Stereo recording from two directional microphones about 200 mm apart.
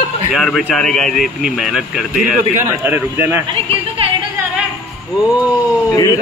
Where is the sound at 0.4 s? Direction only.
Centre (ahead or behind).